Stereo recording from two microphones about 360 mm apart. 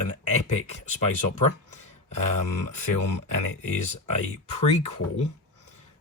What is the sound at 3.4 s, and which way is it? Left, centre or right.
Speech, centre.